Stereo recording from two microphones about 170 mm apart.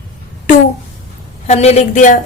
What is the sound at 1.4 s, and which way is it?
Speech, 40° left (ahead or behind).